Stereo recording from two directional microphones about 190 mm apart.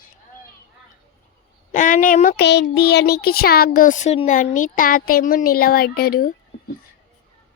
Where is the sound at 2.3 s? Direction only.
65° left (ahead or behind).